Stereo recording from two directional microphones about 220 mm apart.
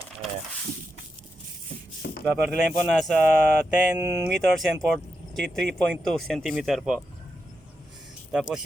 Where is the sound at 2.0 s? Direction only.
50° left (ahead or behind).